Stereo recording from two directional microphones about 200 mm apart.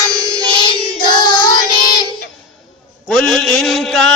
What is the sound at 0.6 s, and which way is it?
Child singing, 25° left (ahead or behind).